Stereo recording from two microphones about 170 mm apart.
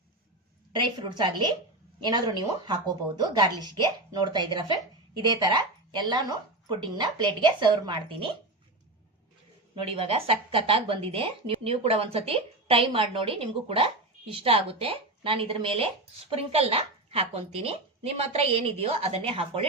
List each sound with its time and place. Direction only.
0.7 s speech: 25° right (ahead or behind)
9.9 s a woman's voice: 35° right (ahead or behind)